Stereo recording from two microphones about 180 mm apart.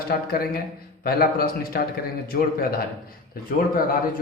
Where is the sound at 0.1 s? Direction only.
55° left (ahead or behind).